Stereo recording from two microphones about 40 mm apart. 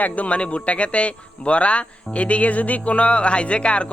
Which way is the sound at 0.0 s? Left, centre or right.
Left.